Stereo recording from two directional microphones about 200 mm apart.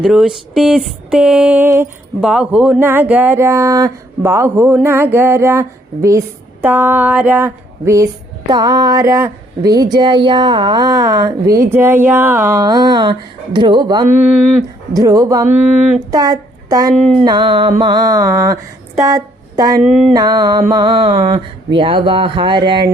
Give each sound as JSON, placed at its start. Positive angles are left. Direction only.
{"t": 0.0, "sound": "a sound", "side_deg": 0}
{"t": 2.2, "sound": "a child's voice", "side_deg": -5}
{"t": 16.9, "sound": "speech", "side_deg": -5}
{"t": 17.2, "sound": "music", "side_deg": -25}
{"t": 19.8, "sound": "a sound", "side_deg": 0}
{"t": 20.1, "sound": "music", "side_deg": -20}